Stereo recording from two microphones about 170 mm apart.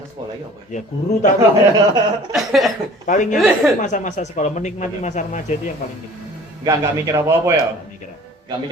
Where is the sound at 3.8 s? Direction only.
50° left (ahead or behind).